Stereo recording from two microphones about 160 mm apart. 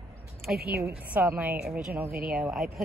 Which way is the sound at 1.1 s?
10° right (ahead or behind).